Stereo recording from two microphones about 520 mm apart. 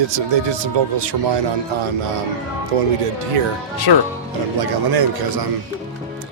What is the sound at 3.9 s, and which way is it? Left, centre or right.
Speech, left.